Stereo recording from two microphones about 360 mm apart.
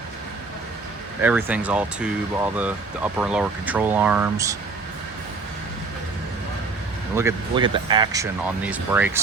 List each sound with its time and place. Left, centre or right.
1.2 s speech: centre
7.2 s speech: centre